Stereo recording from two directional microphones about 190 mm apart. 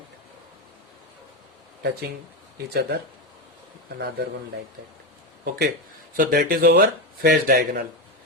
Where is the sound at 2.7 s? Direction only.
60° right (ahead or behind).